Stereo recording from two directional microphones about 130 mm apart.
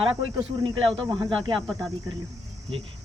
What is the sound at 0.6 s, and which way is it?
Speech, 40° right (ahead or behind).